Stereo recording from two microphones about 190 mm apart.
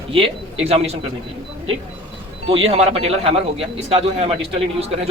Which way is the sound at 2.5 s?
30° right (ahead or behind).